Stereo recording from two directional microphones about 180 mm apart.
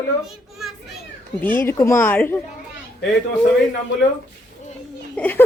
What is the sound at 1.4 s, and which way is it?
Speech, 10° left (ahead or behind).